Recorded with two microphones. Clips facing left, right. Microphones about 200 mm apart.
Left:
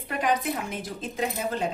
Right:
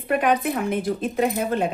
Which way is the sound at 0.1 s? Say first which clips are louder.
Right 6 dB; 60° right (ahead or behind).